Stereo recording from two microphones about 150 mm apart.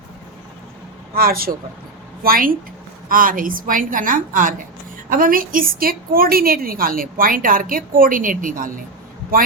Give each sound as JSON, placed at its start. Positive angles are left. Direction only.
{"t": 1.1, "sound": "a woman's voice", "side_deg": -80}